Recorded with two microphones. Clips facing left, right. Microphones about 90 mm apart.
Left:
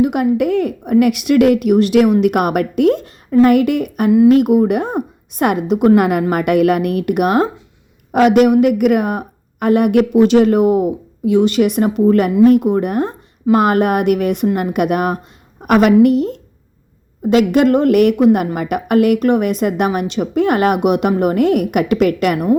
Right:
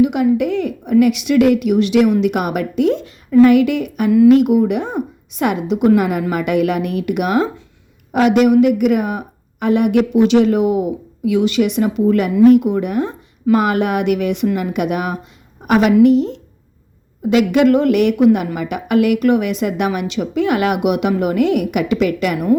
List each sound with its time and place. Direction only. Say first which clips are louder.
0.0 s speech: even; 50° left (ahead or behind)